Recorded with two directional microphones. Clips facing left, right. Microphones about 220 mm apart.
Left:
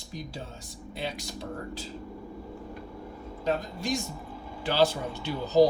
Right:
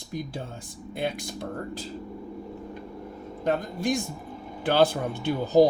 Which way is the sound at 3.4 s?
55° right (ahead or behind).